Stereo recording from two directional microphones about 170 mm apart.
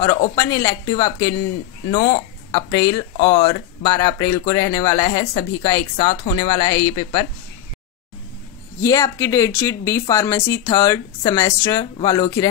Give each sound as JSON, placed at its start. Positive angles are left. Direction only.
{"t": 0.4, "sound": "speech", "side_deg": 20}
{"t": 8.8, "sound": "speech", "side_deg": 20}